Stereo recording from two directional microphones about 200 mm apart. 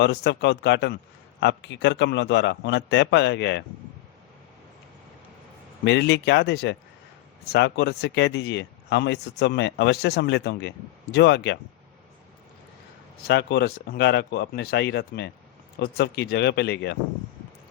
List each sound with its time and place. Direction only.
0.0 s speech: 60° left (ahead or behind)
5.8 s speech: 60° left (ahead or behind)
13.2 s speech: 55° left (ahead or behind)